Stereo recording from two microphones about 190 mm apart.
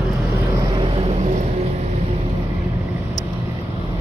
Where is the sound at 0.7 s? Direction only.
30° right (ahead or behind).